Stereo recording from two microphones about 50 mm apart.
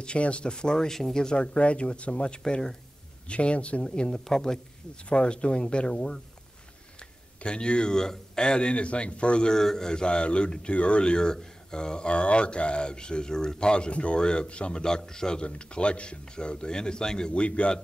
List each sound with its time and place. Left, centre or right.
0.0 s speech: left